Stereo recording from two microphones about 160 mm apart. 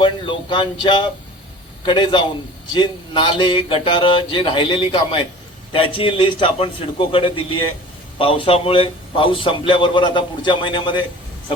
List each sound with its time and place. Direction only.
0.0 s a man's voice: 30° left (ahead or behind)